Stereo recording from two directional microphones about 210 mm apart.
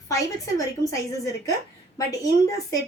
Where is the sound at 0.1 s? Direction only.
15° left (ahead or behind).